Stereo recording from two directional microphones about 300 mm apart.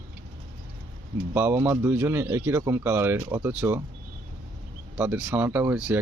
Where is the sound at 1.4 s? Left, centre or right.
Centre.